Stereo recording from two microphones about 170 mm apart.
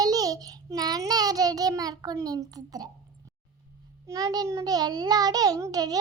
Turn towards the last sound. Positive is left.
turn(degrees=-20)  # may be behind; listen again after turning